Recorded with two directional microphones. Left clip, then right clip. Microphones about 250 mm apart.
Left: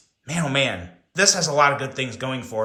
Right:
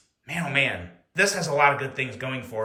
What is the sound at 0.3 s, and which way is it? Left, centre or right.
Speech, centre.